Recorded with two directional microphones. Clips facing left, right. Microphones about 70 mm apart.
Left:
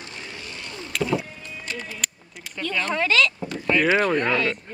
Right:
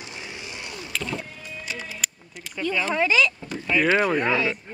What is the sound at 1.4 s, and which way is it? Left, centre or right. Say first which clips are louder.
Music: left 1 dB; centre.